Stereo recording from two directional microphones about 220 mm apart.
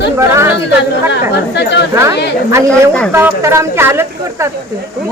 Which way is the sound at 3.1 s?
10° right (ahead or behind).